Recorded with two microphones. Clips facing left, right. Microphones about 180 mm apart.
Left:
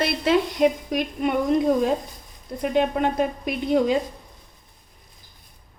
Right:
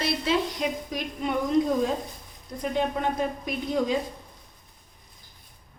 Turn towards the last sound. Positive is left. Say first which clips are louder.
# left 5 dB
turn(degrees=65)  # may be behind; listen again after turning